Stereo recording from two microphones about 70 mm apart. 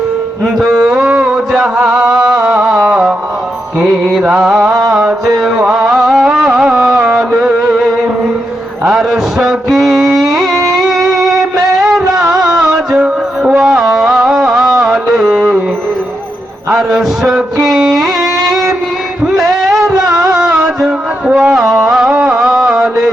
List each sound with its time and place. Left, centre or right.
0.4 s mantra: centre
3.8 s music: centre
4.2 s music: centre
8.8 s mantra: centre
10.3 s music: centre
16.6 s music: centre
19.3 s music: centre
21.5 s music: centre